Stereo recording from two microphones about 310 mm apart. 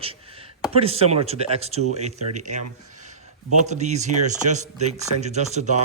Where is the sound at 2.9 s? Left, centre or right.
Right.